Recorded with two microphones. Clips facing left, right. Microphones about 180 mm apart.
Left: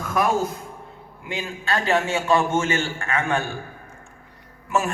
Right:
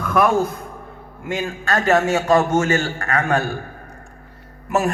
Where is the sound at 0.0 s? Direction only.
60° right (ahead or behind).